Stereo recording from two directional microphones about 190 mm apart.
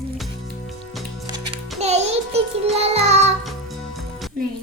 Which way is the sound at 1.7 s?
35° right (ahead or behind).